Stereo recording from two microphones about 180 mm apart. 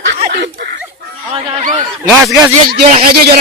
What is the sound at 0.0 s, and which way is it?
Snicker, 65° right (ahead or behind).